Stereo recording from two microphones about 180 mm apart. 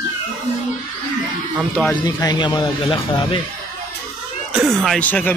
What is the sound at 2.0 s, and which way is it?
Speech, 25° left (ahead or behind).